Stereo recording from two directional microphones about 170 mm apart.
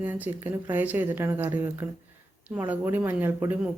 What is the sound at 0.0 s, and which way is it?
A woman's voice, 10° right (ahead or behind).